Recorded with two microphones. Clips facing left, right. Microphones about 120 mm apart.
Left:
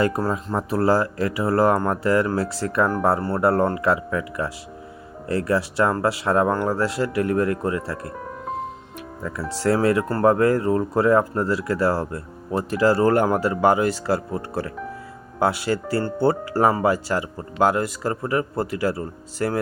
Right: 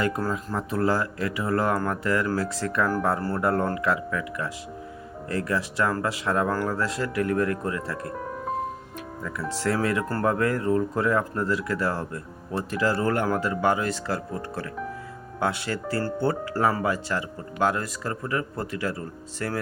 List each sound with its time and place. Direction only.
0.0 s speech: 30° left (ahead or behind)
9.6 s speech: 35° left (ahead or behind)